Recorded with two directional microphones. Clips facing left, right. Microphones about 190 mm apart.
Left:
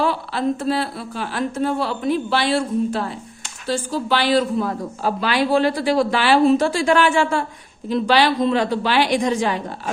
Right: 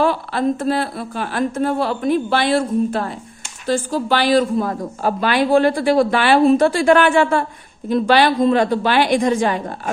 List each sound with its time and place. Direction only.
0.0 s a woman's voice: 50° right (ahead or behind)